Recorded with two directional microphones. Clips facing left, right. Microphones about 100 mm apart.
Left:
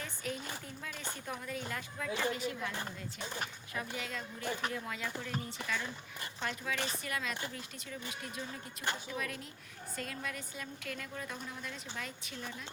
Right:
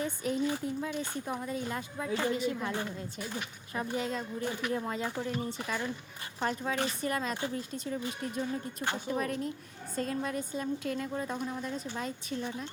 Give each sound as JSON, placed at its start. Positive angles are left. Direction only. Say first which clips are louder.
{"t": 0.0, "sound": "speech", "louder": "right 10 dB", "side_deg": -25}
{"t": 3.8, "sound": "a woman's voice", "louder": "right 7 dB", "side_deg": -30}
{"t": 6.4, "sound": "a woman's voice", "louder": "right 6 dB", "side_deg": -35}